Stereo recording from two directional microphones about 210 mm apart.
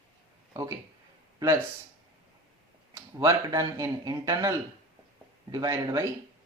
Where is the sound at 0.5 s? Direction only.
15° right (ahead or behind).